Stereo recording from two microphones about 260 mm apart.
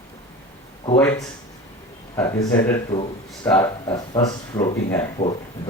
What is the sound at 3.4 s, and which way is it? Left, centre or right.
Speech, centre.